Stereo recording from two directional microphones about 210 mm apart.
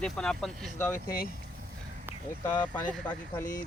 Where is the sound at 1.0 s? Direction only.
45° left (ahead or behind).